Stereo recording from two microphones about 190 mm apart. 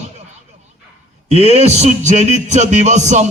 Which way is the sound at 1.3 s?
35° right (ahead or behind).